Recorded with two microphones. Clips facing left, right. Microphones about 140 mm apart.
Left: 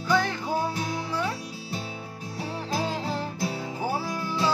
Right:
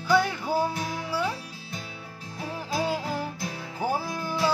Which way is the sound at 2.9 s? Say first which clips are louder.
Right 1 dB; 10° right (ahead or behind).